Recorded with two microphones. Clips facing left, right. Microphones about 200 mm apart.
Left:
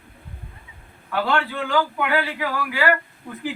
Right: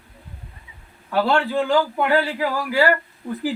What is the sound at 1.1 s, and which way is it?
A man's voice, 35° right (ahead or behind).